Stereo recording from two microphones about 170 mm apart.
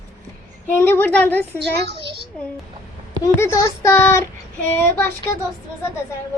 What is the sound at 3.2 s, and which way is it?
Speech, 15° left (ahead or behind).